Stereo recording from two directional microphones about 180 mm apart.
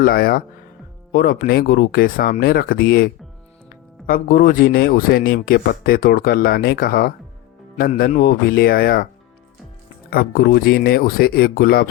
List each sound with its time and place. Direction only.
0.0 s speech: 55° left (ahead or behind)
10.1 s speech: 55° left (ahead or behind)